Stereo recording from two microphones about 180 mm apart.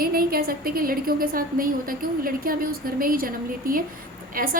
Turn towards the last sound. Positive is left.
turn(degrees=-50)  # may be behind; listen again after turning